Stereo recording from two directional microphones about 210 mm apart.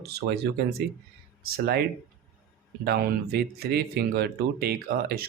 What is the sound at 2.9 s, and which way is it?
Speech, 50° right (ahead or behind).